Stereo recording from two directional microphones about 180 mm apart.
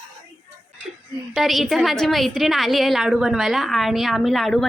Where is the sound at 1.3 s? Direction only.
Centre (ahead or behind).